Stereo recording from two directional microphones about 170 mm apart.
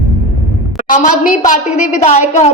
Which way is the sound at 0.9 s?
50° left (ahead or behind).